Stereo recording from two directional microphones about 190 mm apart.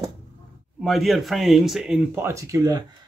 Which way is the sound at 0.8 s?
Centre (ahead or behind).